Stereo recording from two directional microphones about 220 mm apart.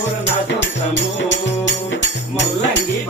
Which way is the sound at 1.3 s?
55° left (ahead or behind).